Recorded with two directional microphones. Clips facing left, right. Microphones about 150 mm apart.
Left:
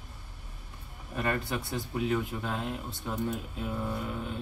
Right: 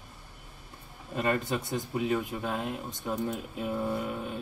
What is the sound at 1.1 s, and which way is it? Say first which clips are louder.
Speech: right 3 dB; 20° right (ahead or behind).